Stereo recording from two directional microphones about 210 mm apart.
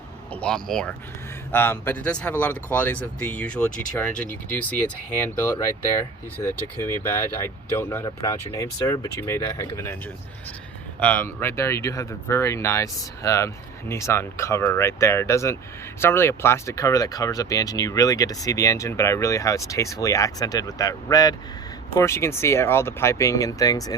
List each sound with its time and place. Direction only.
0.3 s speech: 5° left (ahead or behind)
5.5 s speech: 15° left (ahead or behind)
11.0 s speech: 10° left (ahead or behind)